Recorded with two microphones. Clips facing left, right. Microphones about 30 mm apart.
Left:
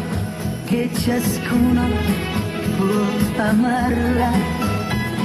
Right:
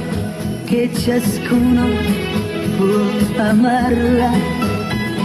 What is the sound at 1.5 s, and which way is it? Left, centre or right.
Music, right.